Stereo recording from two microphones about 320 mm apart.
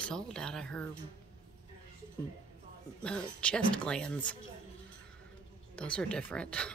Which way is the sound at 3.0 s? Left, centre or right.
Centre.